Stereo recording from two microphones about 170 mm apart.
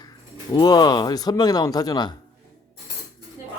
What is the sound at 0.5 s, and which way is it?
Speech, 25° left (ahead or behind).